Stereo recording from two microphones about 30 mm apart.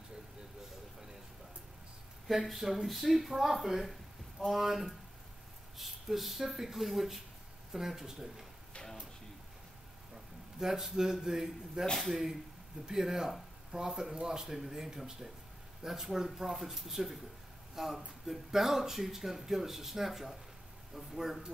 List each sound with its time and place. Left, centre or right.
2.4 s speech: centre
10.1 s a man's voice: centre
11.8 s speech: right
12.1 s speech: centre